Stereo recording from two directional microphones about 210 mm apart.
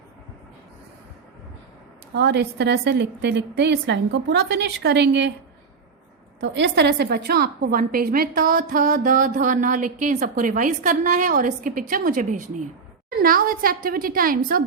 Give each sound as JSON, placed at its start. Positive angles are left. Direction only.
{"t": 2.1, "sound": "a woman's voice", "side_deg": -55}
{"t": 6.4, "sound": "a woman's voice", "side_deg": -55}